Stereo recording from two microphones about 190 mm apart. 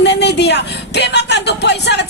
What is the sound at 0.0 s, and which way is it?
Speech, 65° left (ahead or behind).